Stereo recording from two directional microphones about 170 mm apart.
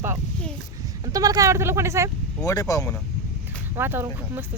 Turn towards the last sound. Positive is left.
turn(degrees=-15)  # may be behind; listen again after turning